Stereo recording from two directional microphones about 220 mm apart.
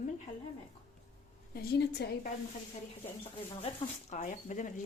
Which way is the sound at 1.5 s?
45° left (ahead or behind).